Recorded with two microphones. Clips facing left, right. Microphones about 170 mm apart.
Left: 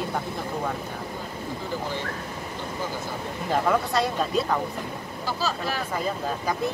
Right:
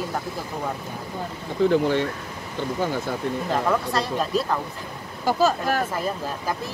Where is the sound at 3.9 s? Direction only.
Centre (ahead or behind).